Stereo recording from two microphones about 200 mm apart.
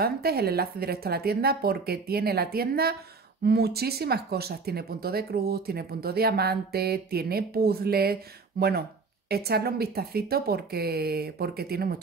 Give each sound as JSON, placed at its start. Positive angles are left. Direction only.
{"t": 0.0, "sound": "speech", "side_deg": -50}